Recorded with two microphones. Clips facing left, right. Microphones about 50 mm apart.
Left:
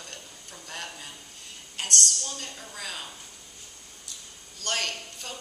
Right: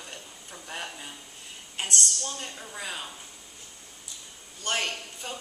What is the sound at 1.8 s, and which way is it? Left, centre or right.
A woman's voice, centre.